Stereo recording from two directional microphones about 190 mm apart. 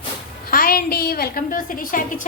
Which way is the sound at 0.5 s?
50° left (ahead or behind).